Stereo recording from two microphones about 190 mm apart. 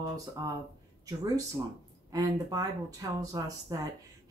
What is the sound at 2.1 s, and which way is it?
A woman's voice, 20° right (ahead or behind).